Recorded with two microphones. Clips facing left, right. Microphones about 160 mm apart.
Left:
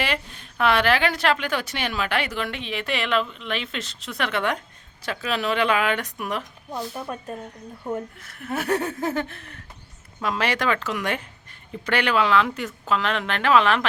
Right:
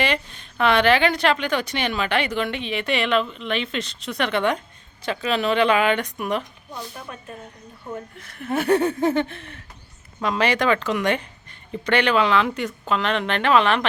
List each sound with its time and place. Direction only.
0.0 s a woman's voice: 5° left (ahead or behind)
6.9 s speech: 40° left (ahead or behind)
8.2 s a woman's voice: centre (ahead or behind)